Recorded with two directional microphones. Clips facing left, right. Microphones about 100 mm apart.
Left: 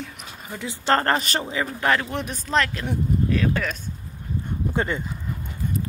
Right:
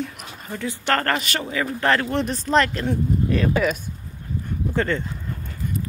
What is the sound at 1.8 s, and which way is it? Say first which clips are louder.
Speech: right 3 dB; 5° left (ahead or behind).